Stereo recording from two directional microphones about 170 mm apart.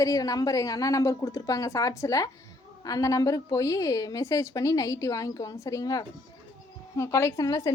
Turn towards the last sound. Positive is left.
turn(degrees=20)  # may be behind; listen again after turning